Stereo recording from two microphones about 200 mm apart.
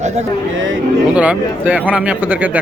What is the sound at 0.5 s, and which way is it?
Speech, 70° right (ahead or behind).